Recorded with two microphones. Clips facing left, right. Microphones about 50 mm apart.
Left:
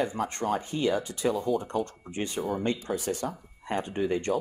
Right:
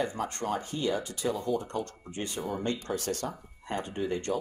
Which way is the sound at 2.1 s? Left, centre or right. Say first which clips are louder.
Left 3 dB; left.